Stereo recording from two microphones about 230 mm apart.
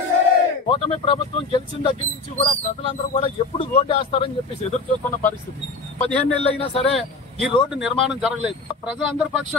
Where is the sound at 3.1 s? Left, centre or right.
Left.